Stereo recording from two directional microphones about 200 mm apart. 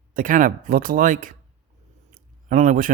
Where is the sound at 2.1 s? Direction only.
40° right (ahead or behind).